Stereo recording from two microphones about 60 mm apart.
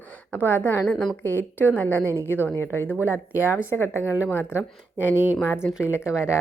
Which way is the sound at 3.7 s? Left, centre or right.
Left.